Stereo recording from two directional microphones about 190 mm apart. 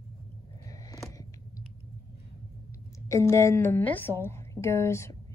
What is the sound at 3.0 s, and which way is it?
A woman's voice, 15° left (ahead or behind).